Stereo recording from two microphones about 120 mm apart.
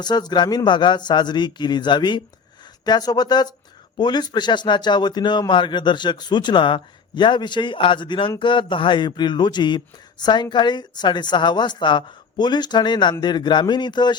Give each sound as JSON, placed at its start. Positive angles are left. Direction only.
{"t": 0.0, "sound": "speech", "side_deg": 35}